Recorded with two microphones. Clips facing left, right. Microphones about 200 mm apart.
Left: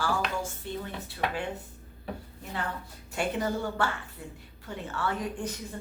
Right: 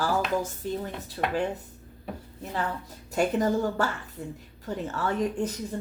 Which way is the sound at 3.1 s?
40° right (ahead or behind).